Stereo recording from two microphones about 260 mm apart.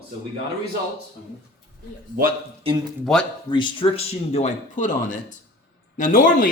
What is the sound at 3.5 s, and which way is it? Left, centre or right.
A man's voice, centre.